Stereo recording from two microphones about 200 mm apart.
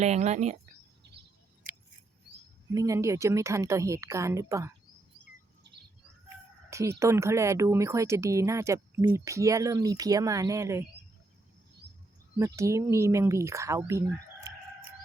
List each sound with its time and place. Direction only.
0.0 s speech: 35° right (ahead or behind)
2.7 s speech: 15° right (ahead or behind)
6.2 s bird: 15° right (ahead or behind)
7.0 s speech: 15° right (ahead or behind)
12.5 s speech: 15° right (ahead or behind)